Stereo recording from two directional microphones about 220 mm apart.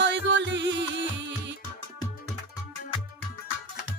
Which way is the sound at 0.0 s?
55° right (ahead or behind).